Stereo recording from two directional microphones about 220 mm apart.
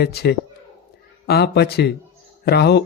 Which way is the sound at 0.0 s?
45° left (ahead or behind).